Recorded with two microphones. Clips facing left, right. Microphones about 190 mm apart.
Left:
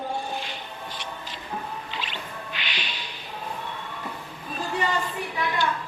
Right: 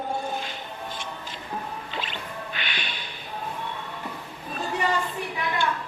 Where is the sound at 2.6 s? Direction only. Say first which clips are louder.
Right 1 dB; 50° right (ahead or behind).